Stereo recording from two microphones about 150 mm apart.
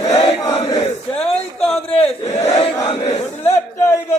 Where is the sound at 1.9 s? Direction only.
40° left (ahead or behind).